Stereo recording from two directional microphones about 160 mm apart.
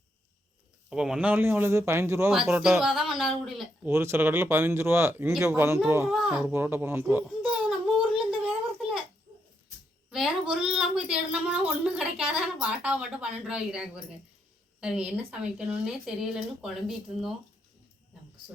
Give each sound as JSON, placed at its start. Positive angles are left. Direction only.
{"t": 0.9, "sound": "speech", "side_deg": -5}
{"t": 2.6, "sound": "speech", "side_deg": -5}
{"t": 3.9, "sound": "speech", "side_deg": -15}
{"t": 7.9, "sound": "a sound", "side_deg": -5}
{"t": 10.1, "sound": "speech", "side_deg": -5}